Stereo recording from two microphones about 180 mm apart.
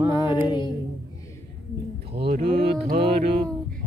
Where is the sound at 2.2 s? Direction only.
30° right (ahead or behind).